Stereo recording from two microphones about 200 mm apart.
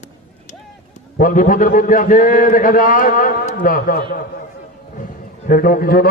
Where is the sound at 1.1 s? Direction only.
40° left (ahead or behind).